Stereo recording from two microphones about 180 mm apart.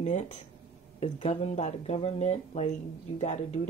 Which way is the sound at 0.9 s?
35° left (ahead or behind).